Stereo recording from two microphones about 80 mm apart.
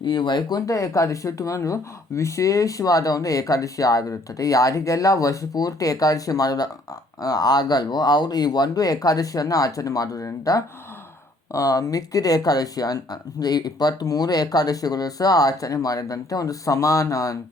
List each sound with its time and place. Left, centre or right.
0.0 s speech: left
0.6 s speech: left